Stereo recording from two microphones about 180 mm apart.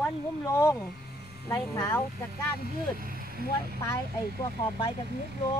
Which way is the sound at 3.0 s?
55° right (ahead or behind).